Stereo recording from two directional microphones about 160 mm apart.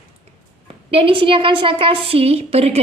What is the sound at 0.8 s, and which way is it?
A woman's voice, 35° right (ahead or behind).